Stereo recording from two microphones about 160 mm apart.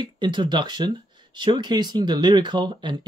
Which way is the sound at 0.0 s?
30° right (ahead or behind).